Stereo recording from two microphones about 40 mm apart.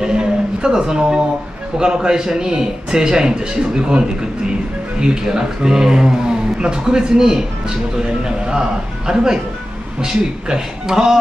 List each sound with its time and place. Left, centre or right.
0.0 s a man's voice: centre
5.0 s speech: centre